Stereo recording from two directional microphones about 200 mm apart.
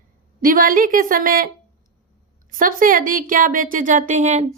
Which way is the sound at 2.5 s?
45° right (ahead or behind).